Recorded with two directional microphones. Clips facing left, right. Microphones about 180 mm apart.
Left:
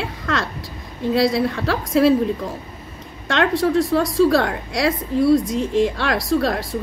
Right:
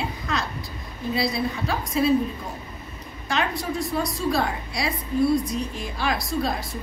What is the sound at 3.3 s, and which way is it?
A woman's voice, 90° left.